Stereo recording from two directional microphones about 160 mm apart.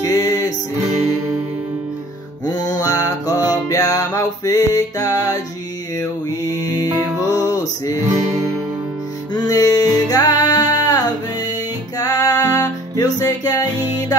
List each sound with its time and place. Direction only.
0.0 s music: 25° left (ahead or behind)
2.4 s music: 25° left (ahead or behind)
5.9 s mantra: 25° left (ahead or behind)
7.2 s music: 20° left (ahead or behind)
9.3 s music: 25° left (ahead or behind)